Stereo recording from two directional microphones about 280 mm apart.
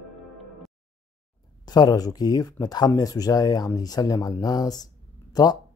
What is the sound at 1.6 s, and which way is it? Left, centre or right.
Speech, centre.